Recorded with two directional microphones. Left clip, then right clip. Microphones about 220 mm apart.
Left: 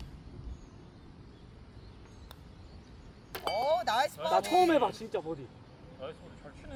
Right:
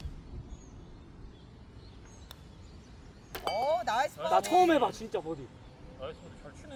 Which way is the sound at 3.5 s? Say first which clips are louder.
Left 1 dB; 30° left (ahead or behind).